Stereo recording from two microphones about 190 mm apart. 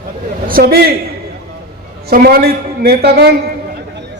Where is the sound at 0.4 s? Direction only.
50° right (ahead or behind).